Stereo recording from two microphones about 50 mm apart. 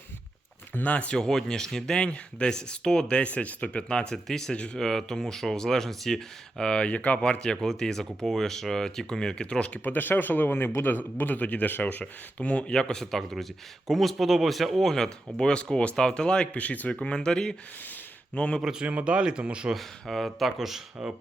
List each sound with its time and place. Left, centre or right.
0.9 s speech: left
1.2 s speech: centre
3.2 s speech: left; by 4.5 s centre
4.5 s speech: left
4.8 s speech: centre
9.8 s speech: left
12.7 s speech: centre
14.9 s speech: centre
16.6 s speech: left
16.9 s speech: centre
18.3 s speech: left
18.6 s speech: centre
18.9 s speech: right
19.7 s speech: centre